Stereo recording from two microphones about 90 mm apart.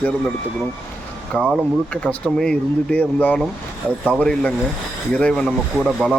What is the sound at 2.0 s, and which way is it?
Speech, 5° left (ahead or behind).